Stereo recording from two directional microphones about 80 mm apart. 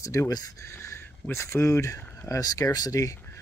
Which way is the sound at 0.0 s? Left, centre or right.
Left.